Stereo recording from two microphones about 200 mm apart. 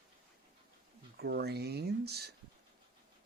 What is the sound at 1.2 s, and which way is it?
Speech, 55° right (ahead or behind).